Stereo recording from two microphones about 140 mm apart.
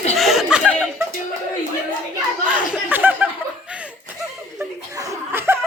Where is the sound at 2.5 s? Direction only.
15° right (ahead or behind).